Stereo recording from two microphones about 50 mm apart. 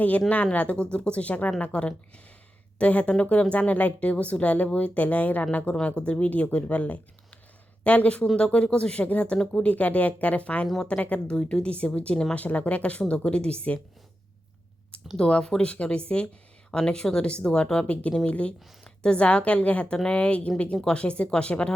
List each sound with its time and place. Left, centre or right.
0.5 s a woman's voice: left
9.6 s speech: left
15.1 s speech: centre